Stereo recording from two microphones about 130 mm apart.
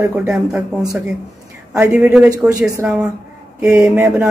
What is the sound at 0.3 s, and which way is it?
Speech, 10° right (ahead or behind).